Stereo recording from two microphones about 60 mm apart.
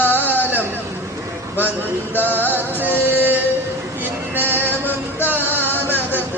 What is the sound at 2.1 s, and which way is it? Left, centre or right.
Music, left.